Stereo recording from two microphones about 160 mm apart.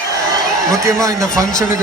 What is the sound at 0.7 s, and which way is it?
Speech, 20° right (ahead or behind).